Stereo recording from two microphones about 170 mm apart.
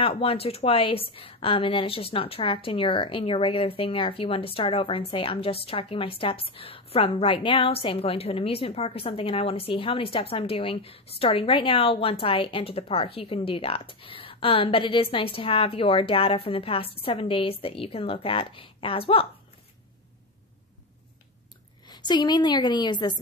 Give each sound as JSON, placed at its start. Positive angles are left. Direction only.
{"t": 0.0, "sound": "a woman's voice", "side_deg": 35}
{"t": 21.8, "sound": "a woman's voice", "side_deg": 25}